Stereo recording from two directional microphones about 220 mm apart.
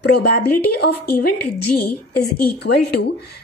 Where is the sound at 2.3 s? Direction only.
45° left (ahead or behind).